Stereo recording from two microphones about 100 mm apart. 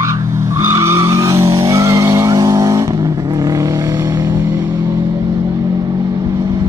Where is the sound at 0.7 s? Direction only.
25° right (ahead or behind).